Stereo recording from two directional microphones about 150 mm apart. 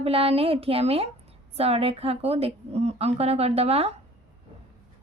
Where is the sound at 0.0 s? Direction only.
40° right (ahead or behind).